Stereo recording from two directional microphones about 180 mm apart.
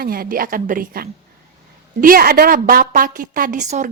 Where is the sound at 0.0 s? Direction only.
55° right (ahead or behind).